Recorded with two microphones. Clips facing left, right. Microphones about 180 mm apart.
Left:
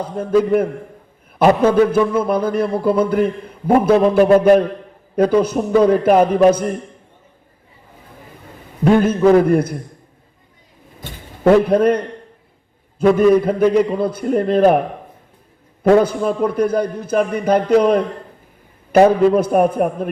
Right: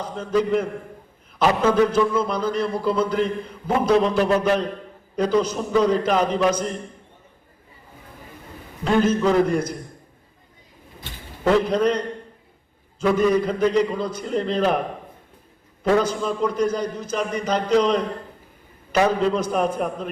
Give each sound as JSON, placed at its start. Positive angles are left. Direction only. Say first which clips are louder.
{"t": 0.0, "sound": "a man's voice", "louder": "left 6 dB", "side_deg": 55}
{"t": 8.8, "sound": "a man's voice", "louder": "left 6 dB", "side_deg": 55}
{"t": 11.4, "sound": "a man's voice", "louder": "left 7 dB", "side_deg": 55}
{"t": 15.8, "sound": "a man's voice", "louder": "left 7 dB", "side_deg": 60}